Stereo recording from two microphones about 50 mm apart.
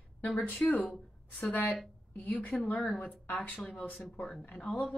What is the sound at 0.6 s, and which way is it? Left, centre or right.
A woman's voice, left.